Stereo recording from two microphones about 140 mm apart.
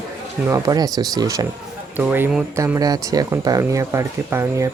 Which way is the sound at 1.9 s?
15° right (ahead or behind).